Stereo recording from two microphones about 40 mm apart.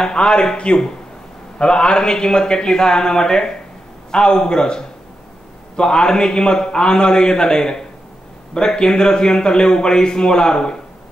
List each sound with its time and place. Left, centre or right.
0.0 s a man's voice: centre